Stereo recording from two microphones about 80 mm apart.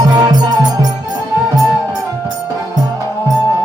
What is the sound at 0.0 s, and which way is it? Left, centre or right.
Music, right.